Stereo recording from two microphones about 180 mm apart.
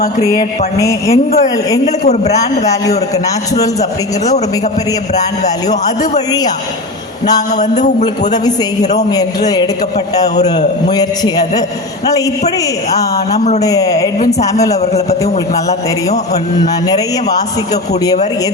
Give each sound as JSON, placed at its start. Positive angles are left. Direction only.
{"t": 0.8, "sound": "speech", "side_deg": 15}
{"t": 2.3, "sound": "a man's voice", "side_deg": 20}
{"t": 8.8, "sound": "a man's voice", "side_deg": 40}
{"t": 9.0, "sound": "a man's voice", "side_deg": 20}
{"t": 10.9, "sound": "a man's voice", "side_deg": 20}
{"t": 12.9, "sound": "a man's voice", "side_deg": 20}